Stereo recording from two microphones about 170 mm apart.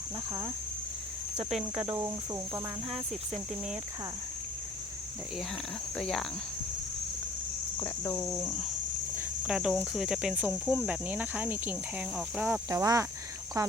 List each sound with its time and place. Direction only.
1.9 s speech: 15° right (ahead or behind)
6.0 s speech: 5° left (ahead or behind)
7.8 s speech: 15° left (ahead or behind)
9.1 s speech: 5° right (ahead or behind)
12.7 s speech: 20° right (ahead or behind)